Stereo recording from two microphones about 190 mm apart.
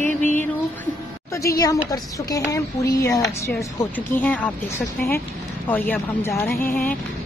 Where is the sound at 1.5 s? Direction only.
20° left (ahead or behind).